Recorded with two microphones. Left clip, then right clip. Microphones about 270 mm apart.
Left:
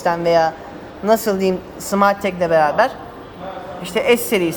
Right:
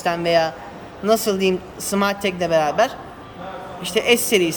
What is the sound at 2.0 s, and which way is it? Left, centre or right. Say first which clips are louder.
Speech: left 6 dB; centre.